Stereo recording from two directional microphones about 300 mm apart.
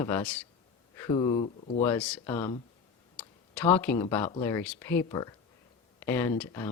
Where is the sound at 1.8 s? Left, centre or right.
Centre.